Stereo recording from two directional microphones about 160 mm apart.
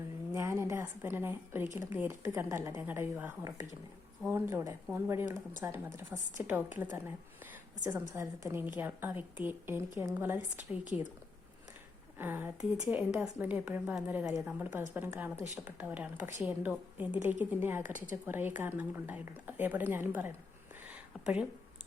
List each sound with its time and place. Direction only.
0.3 s a woman's voice: 20° right (ahead or behind)
8.1 s a woman's voice: 15° right (ahead or behind)
12.1 s a woman's voice: 15° right (ahead or behind)